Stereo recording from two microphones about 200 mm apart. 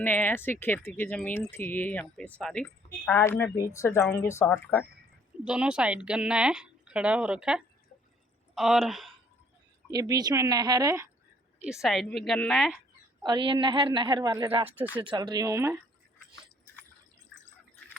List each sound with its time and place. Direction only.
0.0 s speech: 10° left (ahead or behind)
5.5 s speech: 5° right (ahead or behind)
9.9 s speech: 20° right (ahead or behind)
11.6 s speech: centre (ahead or behind)
13.2 s a woman's voice: 20° right (ahead or behind)
14.8 s speech: 10° right (ahead or behind)
15.0 s a woman's voice: 20° right (ahead or behind)